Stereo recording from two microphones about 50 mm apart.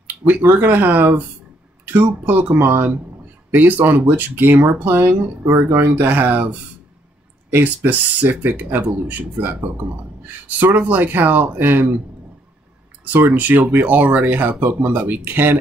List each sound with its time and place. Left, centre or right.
0.5 s speech: right
0.7 s speech: right
5.5 s speech: right
6.0 s speech: right
7.6 s speech: right
13.0 s speech: right